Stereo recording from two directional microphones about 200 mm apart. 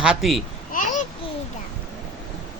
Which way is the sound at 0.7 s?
40° left (ahead or behind).